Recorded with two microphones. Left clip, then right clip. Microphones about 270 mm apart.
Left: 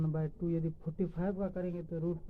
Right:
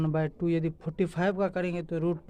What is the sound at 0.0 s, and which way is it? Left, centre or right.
Speech, right.